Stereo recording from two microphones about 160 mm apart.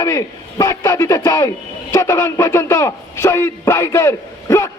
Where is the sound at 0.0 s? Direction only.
20° left (ahead or behind).